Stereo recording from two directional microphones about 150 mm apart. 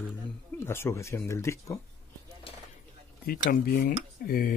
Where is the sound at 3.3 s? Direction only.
90° left; by 4.5 s 70° left (ahead or behind).